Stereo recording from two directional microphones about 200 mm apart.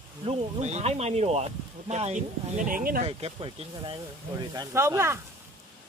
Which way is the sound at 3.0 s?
30° right (ahead or behind).